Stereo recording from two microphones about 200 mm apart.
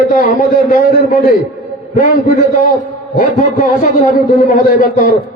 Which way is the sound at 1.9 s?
45° left (ahead or behind).